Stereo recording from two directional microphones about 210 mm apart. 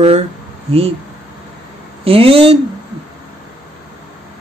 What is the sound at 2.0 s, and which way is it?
Speech, 25° right (ahead or behind).